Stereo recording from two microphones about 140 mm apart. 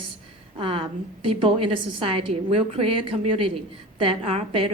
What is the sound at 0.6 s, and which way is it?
A woman's voice, 40° right (ahead or behind).